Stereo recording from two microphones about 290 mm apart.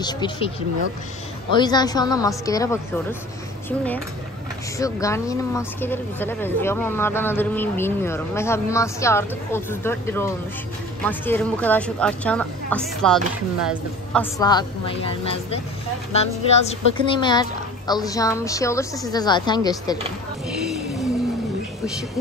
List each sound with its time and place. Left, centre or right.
1.5 s a woman's voice: centre
4.7 s a woman's voice: centre
14.4 s a woman's voice: centre